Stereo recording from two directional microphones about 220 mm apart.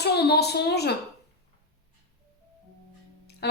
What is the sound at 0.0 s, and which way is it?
Speech, 50° left (ahead or behind).